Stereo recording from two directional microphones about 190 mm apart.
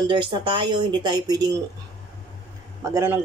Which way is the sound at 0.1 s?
25° right (ahead or behind).